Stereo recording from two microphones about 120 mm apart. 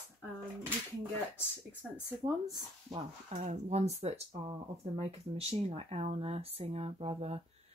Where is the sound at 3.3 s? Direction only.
70° right (ahead or behind).